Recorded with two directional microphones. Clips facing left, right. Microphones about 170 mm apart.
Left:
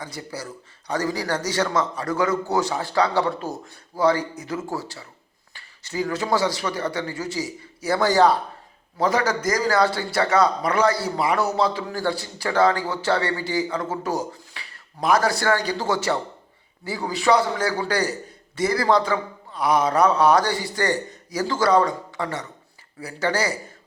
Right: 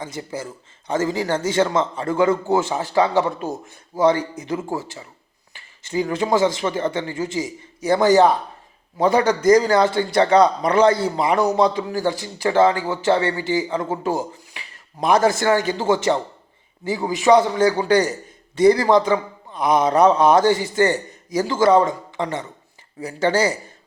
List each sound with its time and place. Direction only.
0.0 s a man's voice: 25° right (ahead or behind)